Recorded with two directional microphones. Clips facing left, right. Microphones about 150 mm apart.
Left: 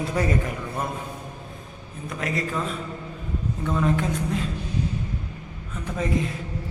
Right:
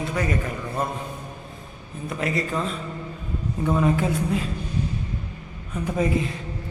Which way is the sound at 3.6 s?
15° right (ahead or behind).